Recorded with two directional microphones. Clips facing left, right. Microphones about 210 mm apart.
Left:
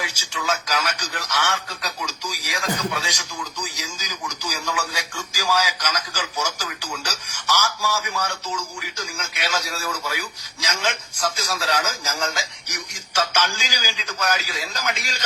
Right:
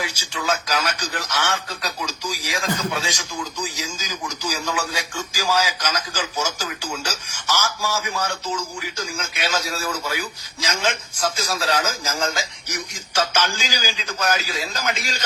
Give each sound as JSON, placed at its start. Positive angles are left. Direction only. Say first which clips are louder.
{"t": 0.3, "sound": "speech", "louder": "right 2 dB", "side_deg": -30}